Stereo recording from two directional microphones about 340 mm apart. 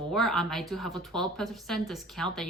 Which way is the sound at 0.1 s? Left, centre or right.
Centre.